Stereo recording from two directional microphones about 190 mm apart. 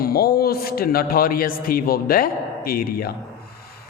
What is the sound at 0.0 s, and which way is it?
A woman's voice, 55° left (ahead or behind).